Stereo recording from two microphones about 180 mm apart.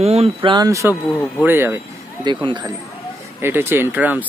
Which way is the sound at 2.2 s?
25° right (ahead or behind).